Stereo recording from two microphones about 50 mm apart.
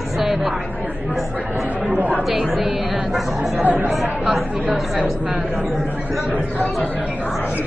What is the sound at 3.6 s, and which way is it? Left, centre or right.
Speech, right.